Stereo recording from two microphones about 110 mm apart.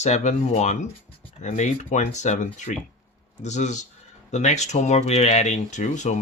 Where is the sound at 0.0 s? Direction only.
90° left.